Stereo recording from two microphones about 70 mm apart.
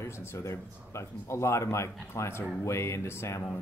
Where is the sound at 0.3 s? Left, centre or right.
Left.